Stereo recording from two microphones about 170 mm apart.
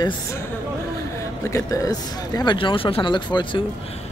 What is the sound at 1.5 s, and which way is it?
Speech, 20° left (ahead or behind).